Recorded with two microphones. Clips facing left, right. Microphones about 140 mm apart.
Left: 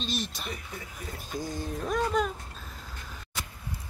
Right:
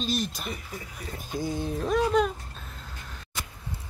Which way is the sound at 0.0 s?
Centre (ahead or behind).